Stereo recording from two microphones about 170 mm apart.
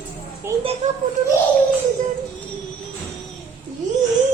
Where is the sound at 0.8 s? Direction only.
40° right (ahead or behind).